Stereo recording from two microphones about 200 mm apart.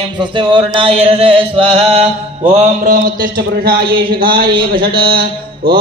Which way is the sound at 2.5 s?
45° right (ahead or behind).